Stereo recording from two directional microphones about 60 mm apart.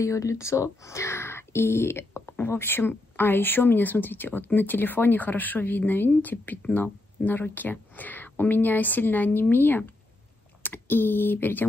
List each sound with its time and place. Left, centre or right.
0.0 s speech: left